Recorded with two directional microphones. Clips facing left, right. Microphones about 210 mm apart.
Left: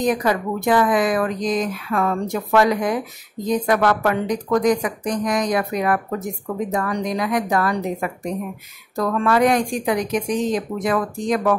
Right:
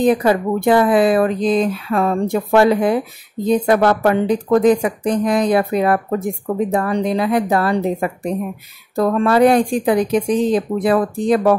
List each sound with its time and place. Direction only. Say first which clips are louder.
0.0 s speech: right 5 dB; 30° right (ahead or behind)